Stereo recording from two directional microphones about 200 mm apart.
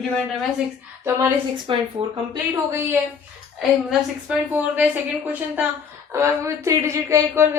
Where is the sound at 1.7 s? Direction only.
25° right (ahead or behind).